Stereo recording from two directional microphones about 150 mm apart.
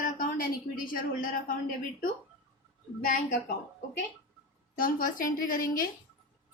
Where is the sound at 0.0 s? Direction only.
70° left (ahead or behind).